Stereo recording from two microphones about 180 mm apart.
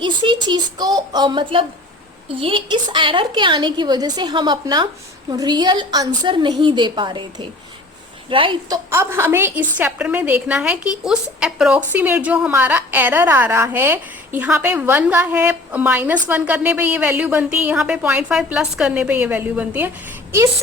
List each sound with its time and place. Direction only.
0.0 s a woman's voice: 25° right (ahead or behind)
8.9 s a woman's voice: 15° right (ahead or behind)